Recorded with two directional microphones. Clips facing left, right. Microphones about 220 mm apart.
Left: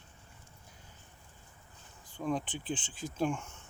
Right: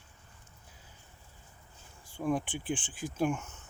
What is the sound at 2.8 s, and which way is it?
Speech, 25° left (ahead or behind).